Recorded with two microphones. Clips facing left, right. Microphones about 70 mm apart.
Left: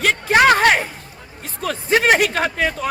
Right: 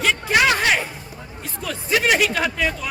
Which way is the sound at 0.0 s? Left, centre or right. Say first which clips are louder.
Left 4 dB; left.